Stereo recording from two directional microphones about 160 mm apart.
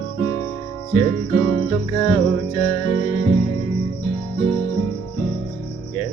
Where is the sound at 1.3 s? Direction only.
20° left (ahead or behind).